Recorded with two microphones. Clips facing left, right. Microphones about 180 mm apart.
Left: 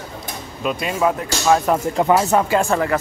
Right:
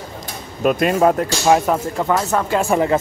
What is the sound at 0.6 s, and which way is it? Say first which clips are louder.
Speech: right 5 dB; 55° right (ahead or behind).